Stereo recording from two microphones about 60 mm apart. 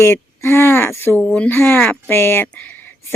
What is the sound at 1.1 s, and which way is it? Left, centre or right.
Speech, left.